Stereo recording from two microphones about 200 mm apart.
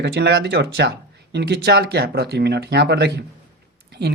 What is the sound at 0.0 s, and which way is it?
Speech, 55° right (ahead or behind).